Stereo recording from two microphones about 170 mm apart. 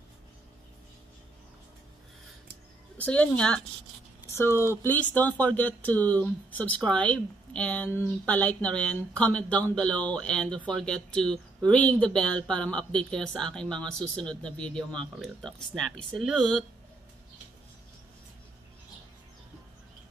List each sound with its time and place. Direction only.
3.0 s speech: 5° left (ahead or behind)